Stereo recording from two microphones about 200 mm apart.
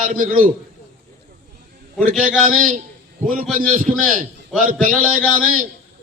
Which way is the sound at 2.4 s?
40° right (ahead or behind).